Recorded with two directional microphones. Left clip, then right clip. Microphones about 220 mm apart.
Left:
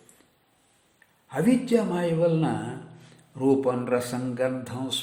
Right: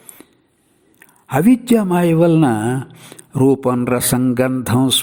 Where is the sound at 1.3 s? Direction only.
45° right (ahead or behind).